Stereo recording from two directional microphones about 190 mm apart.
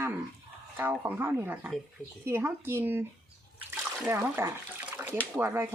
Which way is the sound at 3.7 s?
10° right (ahead or behind).